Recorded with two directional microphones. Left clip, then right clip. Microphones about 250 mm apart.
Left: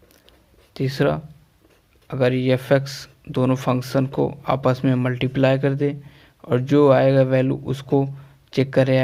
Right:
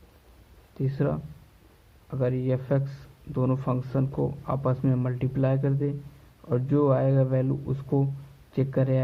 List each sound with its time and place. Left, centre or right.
0.7 s speech: left